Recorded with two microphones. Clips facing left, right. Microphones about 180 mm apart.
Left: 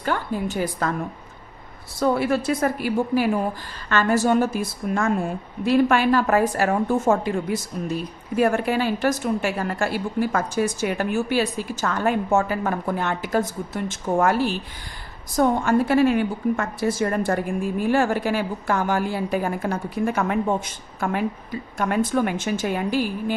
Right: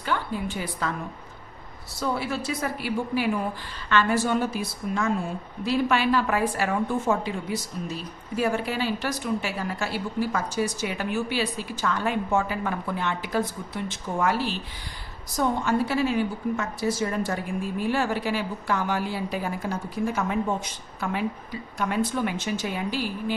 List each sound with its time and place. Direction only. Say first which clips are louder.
0.0 s a woman's voice: left 4 dB; 45° left (ahead or behind)
2.0 s a woman's voice: left 7 dB; 55° left (ahead or behind)
21.0 s a woman's voice: left 4 dB; 50° left (ahead or behind)